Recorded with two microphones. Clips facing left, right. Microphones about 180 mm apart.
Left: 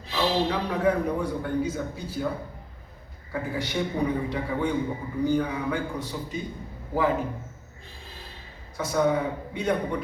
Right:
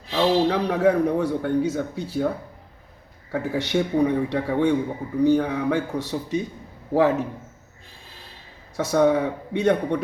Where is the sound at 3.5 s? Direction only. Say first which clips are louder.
Right 7 dB; 75° right (ahead or behind).